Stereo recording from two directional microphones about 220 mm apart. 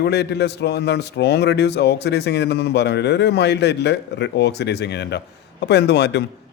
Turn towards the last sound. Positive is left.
turn(degrees=50)  # may be behind; listen again after turning